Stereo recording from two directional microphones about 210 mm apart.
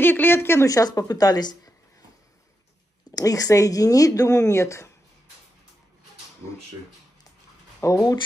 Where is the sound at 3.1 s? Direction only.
15° left (ahead or behind).